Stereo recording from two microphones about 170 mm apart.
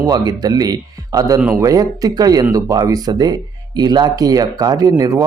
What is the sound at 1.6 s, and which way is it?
A man's voice, 20° right (ahead or behind).